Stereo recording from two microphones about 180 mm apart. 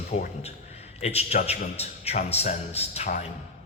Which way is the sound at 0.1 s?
35° left (ahead or behind).